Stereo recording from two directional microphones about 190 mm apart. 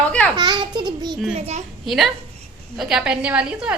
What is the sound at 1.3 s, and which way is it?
Speech, 35° right (ahead or behind).